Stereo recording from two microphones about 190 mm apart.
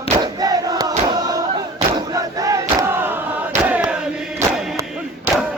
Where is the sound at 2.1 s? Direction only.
20° right (ahead or behind).